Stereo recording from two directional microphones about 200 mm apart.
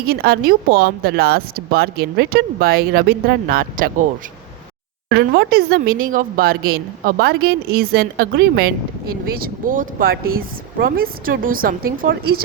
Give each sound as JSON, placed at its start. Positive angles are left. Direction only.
{"t": 0.0, "sound": "speech", "side_deg": -50}
{"t": 5.0, "sound": "speech", "side_deg": -60}